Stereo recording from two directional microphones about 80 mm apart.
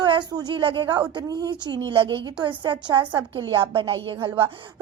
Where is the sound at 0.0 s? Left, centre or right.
Right.